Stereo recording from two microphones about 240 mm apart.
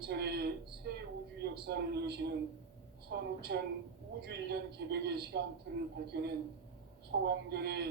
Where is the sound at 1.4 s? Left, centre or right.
Right.